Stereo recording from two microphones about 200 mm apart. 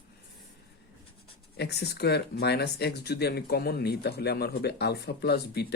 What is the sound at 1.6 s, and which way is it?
Speech, 55° left (ahead or behind).